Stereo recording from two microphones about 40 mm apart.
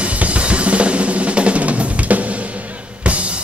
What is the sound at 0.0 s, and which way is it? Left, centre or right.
Drum, right.